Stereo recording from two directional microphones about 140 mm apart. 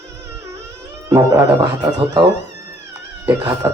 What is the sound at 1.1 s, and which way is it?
Speech, 25° right (ahead or behind).